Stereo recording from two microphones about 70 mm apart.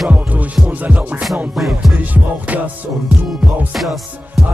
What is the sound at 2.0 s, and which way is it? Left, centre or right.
Music, right.